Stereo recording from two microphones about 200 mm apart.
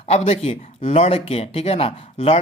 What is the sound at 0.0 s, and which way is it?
Speech, 30° left (ahead or behind).